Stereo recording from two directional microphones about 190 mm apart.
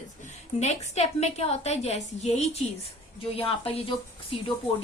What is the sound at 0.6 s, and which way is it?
A woman's voice, 35° left (ahead or behind).